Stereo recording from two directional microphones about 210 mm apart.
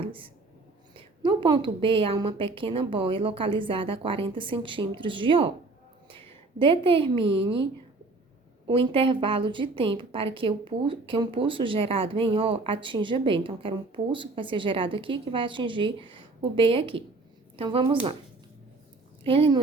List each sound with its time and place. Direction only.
0.9 s speech: 25° right (ahead or behind)
6.1 s a sound: 25° right (ahead or behind)
8.6 s speech: 25° right (ahead or behind)
19.2 s speech: 25° right (ahead or behind)